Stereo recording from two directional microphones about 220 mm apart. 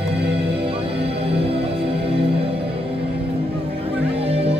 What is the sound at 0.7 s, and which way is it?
Music, 25° right (ahead or behind).